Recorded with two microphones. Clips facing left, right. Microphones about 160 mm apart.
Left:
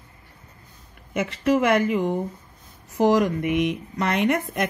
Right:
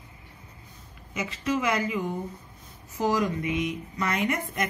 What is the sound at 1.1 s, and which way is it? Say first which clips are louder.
A woman's voice: left 7 dB; 60° left (ahead or behind).